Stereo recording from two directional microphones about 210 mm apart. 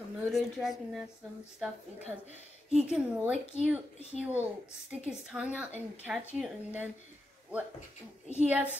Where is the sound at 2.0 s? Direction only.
30° left (ahead or behind).